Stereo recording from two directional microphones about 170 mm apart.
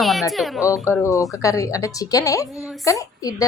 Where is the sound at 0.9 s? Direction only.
20° left (ahead or behind).